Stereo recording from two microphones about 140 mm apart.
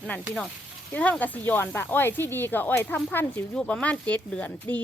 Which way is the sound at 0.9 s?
10° left (ahead or behind).